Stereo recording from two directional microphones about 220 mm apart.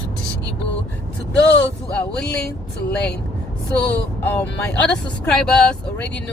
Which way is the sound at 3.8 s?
10° left (ahead or behind).